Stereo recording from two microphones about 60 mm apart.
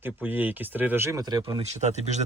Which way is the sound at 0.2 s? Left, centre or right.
Right.